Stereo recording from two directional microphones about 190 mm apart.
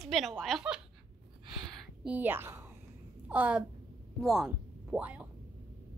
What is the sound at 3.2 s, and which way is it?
A child's voice, 5° right (ahead or behind).